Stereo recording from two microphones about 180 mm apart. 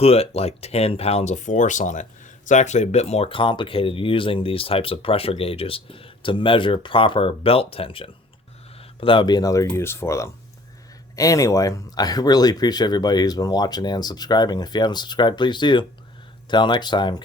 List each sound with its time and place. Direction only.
0.0 s speech: 35° left (ahead or behind)